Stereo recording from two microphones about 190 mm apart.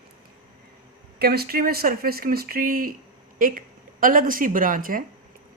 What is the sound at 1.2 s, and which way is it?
A woman's voice, 55° right (ahead or behind).